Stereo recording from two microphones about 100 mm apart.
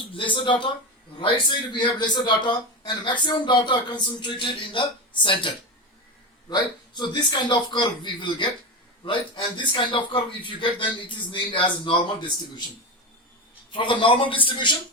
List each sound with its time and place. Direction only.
0.1 s a man's voice: 55° left (ahead or behind)
1.7 s speech: 50° left (ahead or behind)
6.5 s a man's voice: 50° left (ahead or behind)